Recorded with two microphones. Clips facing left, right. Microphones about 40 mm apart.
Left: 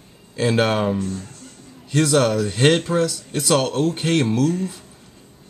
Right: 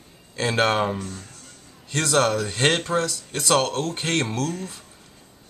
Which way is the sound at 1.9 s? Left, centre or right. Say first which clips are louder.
Left 3 dB; centre.